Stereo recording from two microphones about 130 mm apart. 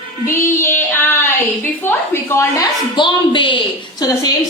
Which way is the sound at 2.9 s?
35° left (ahead or behind).